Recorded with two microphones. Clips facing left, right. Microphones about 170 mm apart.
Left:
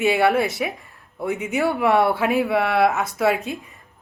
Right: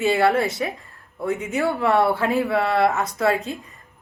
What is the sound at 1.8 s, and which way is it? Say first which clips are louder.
A woman's voice: left 1 dB; centre (ahead or behind).